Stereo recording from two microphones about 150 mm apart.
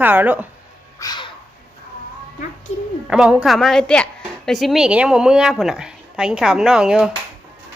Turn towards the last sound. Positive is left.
turn(degrees=-5)  # may be behind; listen again after turning